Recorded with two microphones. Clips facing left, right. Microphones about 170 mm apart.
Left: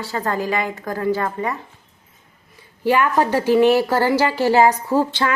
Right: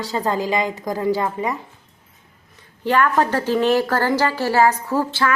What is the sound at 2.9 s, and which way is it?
A woman's voice, 10° left (ahead or behind).